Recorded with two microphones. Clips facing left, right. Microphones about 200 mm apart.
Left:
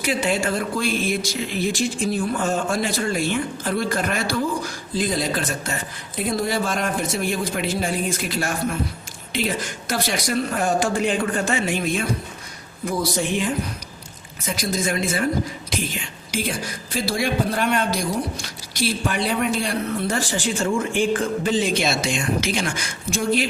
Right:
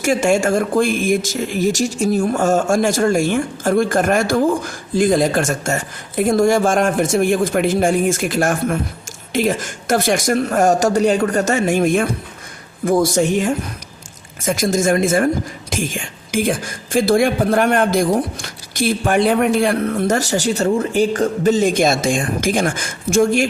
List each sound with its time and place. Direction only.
0.0 s speech: 45° right (ahead or behind)